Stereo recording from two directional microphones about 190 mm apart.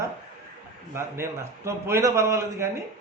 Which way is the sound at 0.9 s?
15° right (ahead or behind).